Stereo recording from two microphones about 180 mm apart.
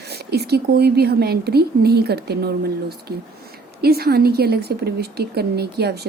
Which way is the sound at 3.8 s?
60° right (ahead or behind).